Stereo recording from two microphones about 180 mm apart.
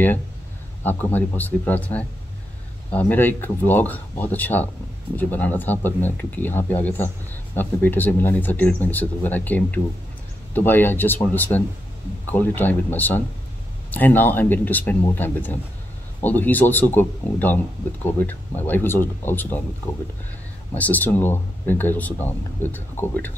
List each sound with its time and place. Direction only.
0.8 s speech: 10° left (ahead or behind)
20.7 s speech: 10° left (ahead or behind)